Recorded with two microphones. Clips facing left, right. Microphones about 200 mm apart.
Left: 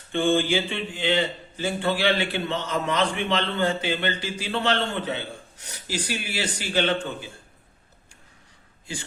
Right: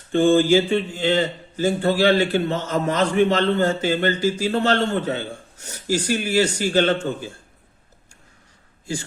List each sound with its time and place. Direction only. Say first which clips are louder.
0.1 s speech: right 7 dB; 40° right (ahead or behind)